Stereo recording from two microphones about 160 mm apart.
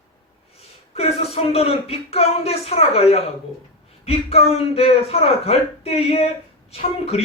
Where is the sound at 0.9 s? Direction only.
40° left (ahead or behind).